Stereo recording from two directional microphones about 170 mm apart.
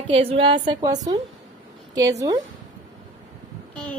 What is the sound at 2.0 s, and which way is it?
Speech, 20° right (ahead or behind).